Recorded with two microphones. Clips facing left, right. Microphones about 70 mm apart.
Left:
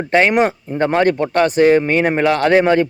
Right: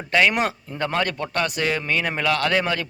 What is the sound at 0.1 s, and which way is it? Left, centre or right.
A man's voice, left.